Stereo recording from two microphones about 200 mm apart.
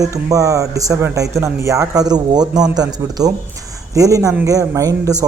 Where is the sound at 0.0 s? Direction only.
15° right (ahead or behind).